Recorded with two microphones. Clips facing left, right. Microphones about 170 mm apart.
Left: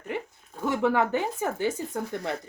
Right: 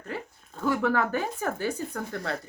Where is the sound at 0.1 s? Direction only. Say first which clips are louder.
Left 3 dB; 20° left (ahead or behind).